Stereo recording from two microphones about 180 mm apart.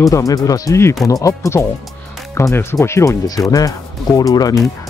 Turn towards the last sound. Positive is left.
turn(degrees=20)  # may be behind; listen again after turning